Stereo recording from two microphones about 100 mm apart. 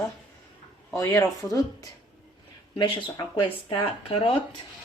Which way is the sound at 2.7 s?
55° left (ahead or behind).